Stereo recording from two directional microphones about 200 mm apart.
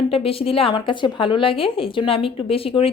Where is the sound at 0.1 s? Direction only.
30° left (ahead or behind).